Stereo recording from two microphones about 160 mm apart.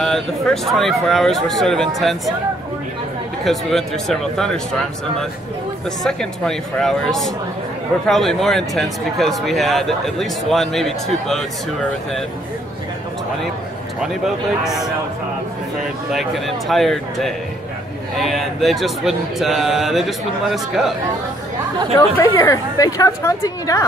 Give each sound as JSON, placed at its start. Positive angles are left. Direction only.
{"t": 0.0, "sound": "speech", "side_deg": 0}
{"t": 3.4, "sound": "speech", "side_deg": 0}
{"t": 6.0, "sound": "speech", "side_deg": 5}
{"t": 14.0, "sound": "speech", "side_deg": 0}
{"t": 16.1, "sound": "speech", "side_deg": 0}
{"t": 22.1, "sound": "a woman's voice", "side_deg": 15}